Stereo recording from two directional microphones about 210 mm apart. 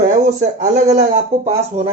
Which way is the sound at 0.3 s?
35° right (ahead or behind).